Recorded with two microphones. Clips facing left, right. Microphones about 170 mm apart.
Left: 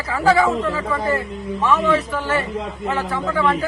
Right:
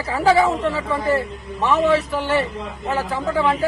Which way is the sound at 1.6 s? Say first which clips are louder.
Right 1 dB; 30° right (ahead or behind).